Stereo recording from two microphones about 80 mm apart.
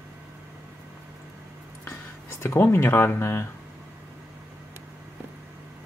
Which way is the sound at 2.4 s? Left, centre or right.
Left.